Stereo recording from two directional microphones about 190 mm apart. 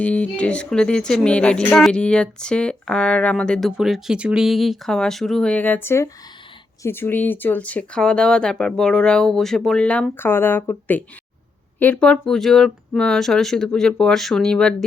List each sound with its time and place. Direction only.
0.0 s speech: 5° left (ahead or behind)